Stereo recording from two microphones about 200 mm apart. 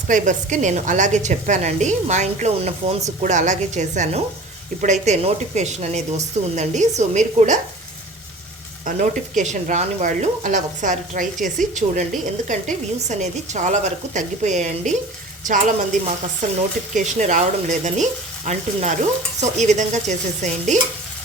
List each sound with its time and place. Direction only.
0.1 s speech: 40° right (ahead or behind)
8.8 s speech: 40° right (ahead or behind)